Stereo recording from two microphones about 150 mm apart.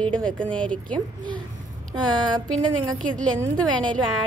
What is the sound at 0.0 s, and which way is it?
Speech, 5° left (ahead or behind).